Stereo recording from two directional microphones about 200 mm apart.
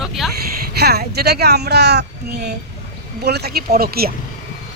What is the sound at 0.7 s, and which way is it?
Speech, 55° right (ahead or behind).